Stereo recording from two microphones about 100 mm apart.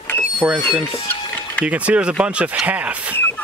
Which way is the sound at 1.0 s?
15° left (ahead or behind).